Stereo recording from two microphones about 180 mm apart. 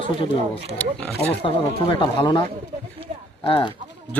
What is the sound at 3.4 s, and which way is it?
Speech, 30° left (ahead or behind).